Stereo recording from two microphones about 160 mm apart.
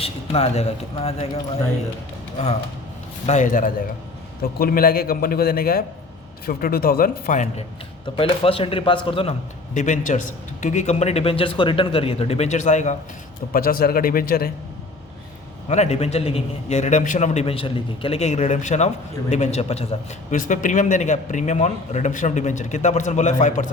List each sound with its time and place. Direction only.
0.0 s speech: 40° left (ahead or behind)
3.2 s speech: 50° left (ahead or behind)
4.5 s a man's voice: 65° left (ahead or behind)
8.0 s speech: 35° left (ahead or behind)
9.7 s a man's voice: 50° left (ahead or behind)
13.5 s speech: 65° left (ahead or behind)
15.7 s a man's voice: 45° left (ahead or behind)
20.3 s a man's voice: 55° left (ahead or behind)